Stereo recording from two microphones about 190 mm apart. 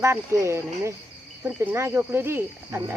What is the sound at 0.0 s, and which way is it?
Speech, 15° right (ahead or behind).